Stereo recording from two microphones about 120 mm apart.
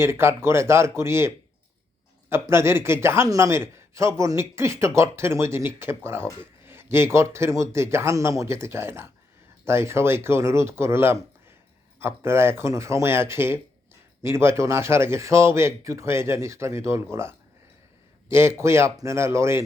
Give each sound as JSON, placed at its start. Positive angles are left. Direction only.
{"t": 0.0, "sound": "a man's voice", "side_deg": -20}
{"t": 2.3, "sound": "a man's voice", "side_deg": -20}